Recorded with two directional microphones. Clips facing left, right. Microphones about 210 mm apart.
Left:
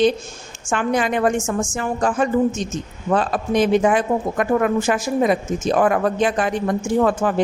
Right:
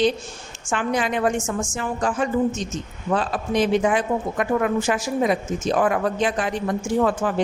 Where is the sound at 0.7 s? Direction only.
45° left (ahead or behind).